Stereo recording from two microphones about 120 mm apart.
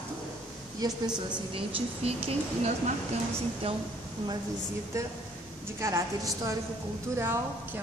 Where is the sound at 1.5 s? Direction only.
50° right (ahead or behind).